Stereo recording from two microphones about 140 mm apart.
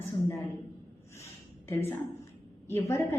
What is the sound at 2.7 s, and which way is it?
Speech, 20° left (ahead or behind).